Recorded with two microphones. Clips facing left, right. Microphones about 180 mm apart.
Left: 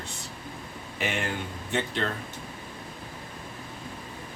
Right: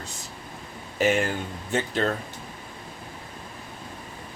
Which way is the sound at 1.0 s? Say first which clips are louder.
Right 8 dB; 40° right (ahead or behind).